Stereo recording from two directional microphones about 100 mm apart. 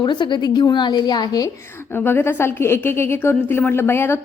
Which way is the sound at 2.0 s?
20° left (ahead or behind).